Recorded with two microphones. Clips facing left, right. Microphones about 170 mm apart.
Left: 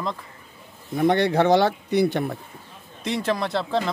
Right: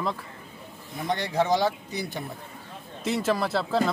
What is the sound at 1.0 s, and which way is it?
Speech, 60° left (ahead or behind).